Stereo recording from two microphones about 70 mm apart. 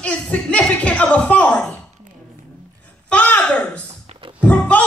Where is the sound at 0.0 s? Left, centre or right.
Centre.